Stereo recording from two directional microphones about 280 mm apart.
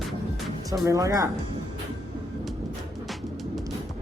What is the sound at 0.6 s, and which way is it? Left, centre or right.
Speech, centre.